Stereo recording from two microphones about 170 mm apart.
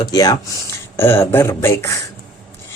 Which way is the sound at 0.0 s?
20° left (ahead or behind).